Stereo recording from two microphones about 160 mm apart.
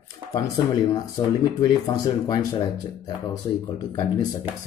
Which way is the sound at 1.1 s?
25° left (ahead or behind).